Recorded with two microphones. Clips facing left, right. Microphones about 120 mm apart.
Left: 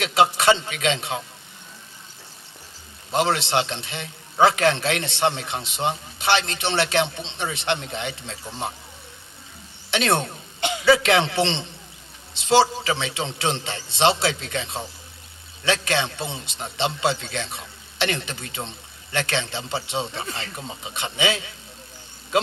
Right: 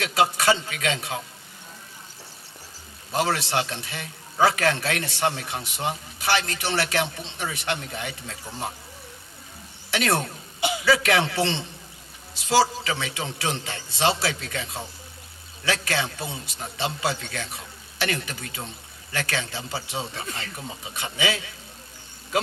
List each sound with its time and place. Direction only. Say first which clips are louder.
0.0 s a man's voice: left 3 dB; 25° left (ahead or behind)
3.1 s a man's voice: left 3 dB; 25° left (ahead or behind)
9.9 s a man's voice: left 2 dB; 25° left (ahead or behind)